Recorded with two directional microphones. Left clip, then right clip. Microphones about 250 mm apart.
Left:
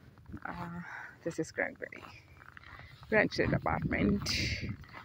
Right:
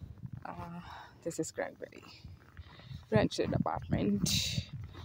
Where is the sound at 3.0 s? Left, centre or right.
Centre.